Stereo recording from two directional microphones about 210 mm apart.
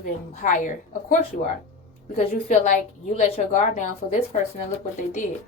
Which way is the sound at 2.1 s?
35° left (ahead or behind).